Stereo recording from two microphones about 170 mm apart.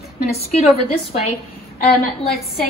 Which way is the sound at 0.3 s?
40° left (ahead or behind).